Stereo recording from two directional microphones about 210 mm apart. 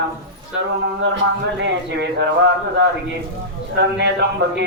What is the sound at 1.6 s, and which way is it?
Speech, 55° right (ahead or behind).